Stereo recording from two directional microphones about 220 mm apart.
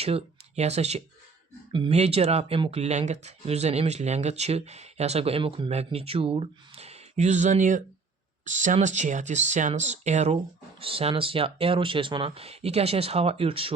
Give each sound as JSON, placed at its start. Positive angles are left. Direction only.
{"t": 0.0, "sound": "speech", "side_deg": -25}